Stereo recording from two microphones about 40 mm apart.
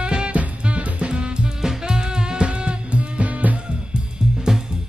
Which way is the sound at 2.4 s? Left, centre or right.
Right.